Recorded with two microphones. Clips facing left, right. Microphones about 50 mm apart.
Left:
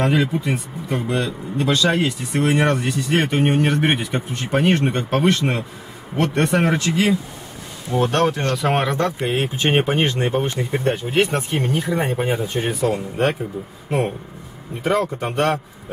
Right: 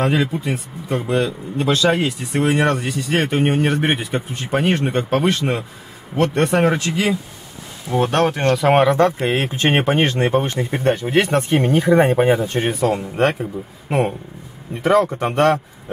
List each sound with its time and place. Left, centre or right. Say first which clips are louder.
0.0 s speech: even; centre
7.9 s speech: right 1 dB; right
8.6 s speech: right 6 dB; centre
8.9 s speech: right 5 dB; right
9.3 s speech: right 1 dB; right
13.8 s speech: right 2 dB; right
14.8 s speech: right 5 dB; right